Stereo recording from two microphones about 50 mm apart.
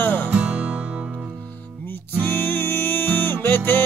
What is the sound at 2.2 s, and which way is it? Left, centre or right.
Music, left.